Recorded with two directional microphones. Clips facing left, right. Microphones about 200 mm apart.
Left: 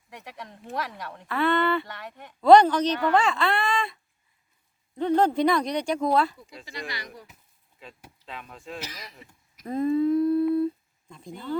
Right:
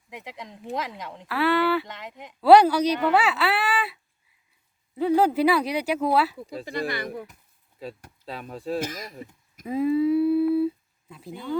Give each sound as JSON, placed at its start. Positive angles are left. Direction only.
{"t": 0.1, "sound": "speech", "side_deg": -15}
{"t": 1.3, "sound": "speech", "side_deg": -5}
{"t": 1.9, "sound": "speech", "side_deg": -20}
{"t": 2.4, "sound": "speech", "side_deg": -5}
{"t": 6.7, "sound": "speech", "side_deg": -55}
{"t": 7.8, "sound": "speech", "side_deg": -35}
{"t": 8.8, "sound": "speech", "side_deg": -50}
{"t": 9.6, "sound": "a sound", "side_deg": -5}